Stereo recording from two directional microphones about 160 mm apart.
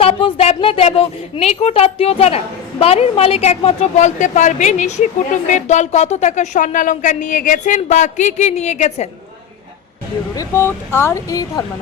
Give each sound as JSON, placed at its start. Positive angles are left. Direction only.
{"t": 0.0, "sound": "a woman's voice", "side_deg": 35}
{"t": 10.3, "sound": "speech", "side_deg": 15}